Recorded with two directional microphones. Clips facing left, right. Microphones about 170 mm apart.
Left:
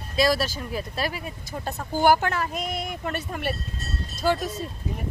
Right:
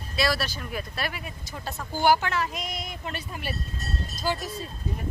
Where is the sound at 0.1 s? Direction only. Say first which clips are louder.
Left 5 dB; 40° left (ahead or behind); by 4.5 s 60° left (ahead or behind).